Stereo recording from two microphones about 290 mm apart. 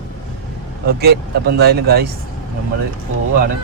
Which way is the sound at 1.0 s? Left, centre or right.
Right.